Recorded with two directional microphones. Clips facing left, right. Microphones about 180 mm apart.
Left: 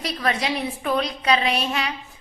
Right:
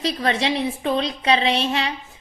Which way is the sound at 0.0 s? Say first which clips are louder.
Right 3 dB; 25° right (ahead or behind).